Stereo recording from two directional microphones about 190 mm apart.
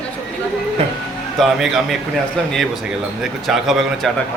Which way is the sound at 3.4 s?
Centre (ahead or behind).